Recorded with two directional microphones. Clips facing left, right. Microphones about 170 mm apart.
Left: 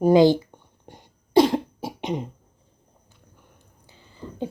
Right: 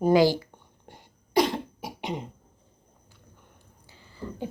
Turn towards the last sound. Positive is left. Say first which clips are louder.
# left 3 dB
turn(degrees=20)  # may be behind; listen again after turning